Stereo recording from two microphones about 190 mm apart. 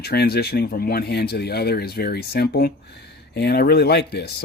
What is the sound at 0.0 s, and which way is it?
A man's voice, 55° left (ahead or behind).